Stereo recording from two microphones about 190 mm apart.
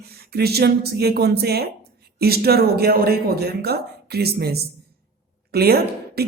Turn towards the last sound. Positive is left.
turn(degrees=-55)  # may be behind; listen again after turning